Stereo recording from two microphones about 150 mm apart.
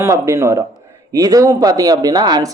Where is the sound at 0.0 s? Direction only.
20° right (ahead or behind).